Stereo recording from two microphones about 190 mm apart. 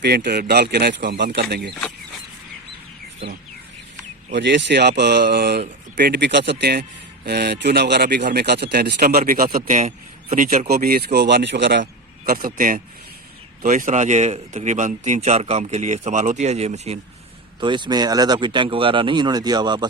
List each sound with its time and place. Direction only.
0.0 s speech: 60° right (ahead or behind)
4.3 s speech: 65° right (ahead or behind); by 17.0 s 35° right (ahead or behind)
17.6 s speech: 25° right (ahead or behind)